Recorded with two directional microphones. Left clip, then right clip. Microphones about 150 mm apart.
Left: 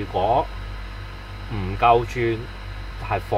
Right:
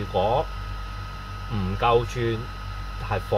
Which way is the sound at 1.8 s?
25° left (ahead or behind).